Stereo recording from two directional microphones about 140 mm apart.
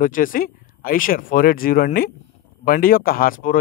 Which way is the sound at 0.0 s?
75° left (ahead or behind).